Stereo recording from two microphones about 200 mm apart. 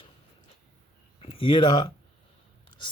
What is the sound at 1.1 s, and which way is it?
Speech, 25° left (ahead or behind).